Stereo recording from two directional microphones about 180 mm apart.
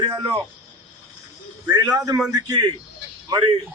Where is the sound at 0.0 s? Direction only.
25° right (ahead or behind).